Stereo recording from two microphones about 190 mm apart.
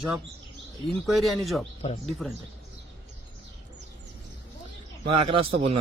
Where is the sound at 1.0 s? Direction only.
Centre (ahead or behind).